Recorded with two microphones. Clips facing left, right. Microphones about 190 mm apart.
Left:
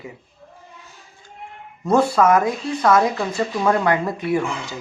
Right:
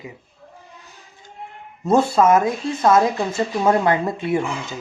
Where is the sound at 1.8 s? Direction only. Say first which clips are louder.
Even; 25° right (ahead or behind).